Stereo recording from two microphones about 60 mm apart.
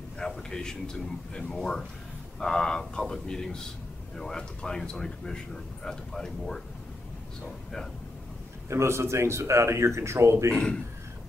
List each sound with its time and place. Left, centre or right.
0.2 s speech: centre
8.6 s speech: right
10.5 s speech: centre